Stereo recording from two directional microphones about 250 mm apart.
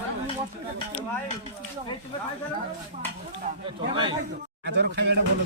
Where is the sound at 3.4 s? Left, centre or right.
Right.